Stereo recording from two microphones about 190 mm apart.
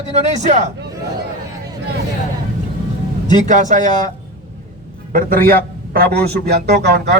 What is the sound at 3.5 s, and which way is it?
Speech, 40° right (ahead or behind).